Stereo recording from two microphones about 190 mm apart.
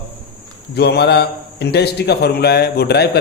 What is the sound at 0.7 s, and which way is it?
A man's voice, 60° left (ahead or behind).